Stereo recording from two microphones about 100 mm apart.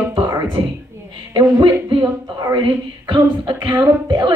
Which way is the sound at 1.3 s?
60° right (ahead or behind).